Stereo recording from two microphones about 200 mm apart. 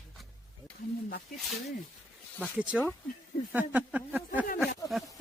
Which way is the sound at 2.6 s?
5° right (ahead or behind).